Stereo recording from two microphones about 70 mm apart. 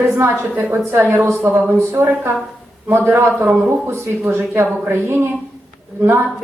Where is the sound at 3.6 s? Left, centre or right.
Right.